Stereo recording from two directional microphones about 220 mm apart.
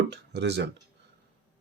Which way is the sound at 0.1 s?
50° right (ahead or behind).